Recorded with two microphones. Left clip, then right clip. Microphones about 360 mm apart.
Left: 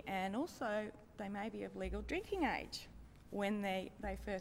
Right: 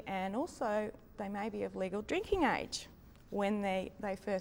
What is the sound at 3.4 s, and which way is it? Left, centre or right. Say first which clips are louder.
A woman's voice: right 5 dB; right.